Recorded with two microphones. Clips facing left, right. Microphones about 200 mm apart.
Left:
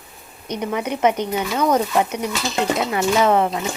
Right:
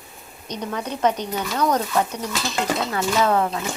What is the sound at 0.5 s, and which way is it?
Speech, 20° left (ahead or behind).